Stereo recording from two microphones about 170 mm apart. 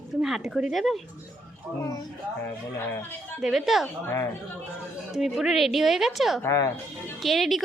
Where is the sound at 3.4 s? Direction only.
Centre (ahead or behind).